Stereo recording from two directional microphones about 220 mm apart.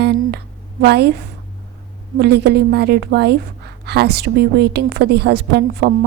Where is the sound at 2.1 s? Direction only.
50° right (ahead or behind).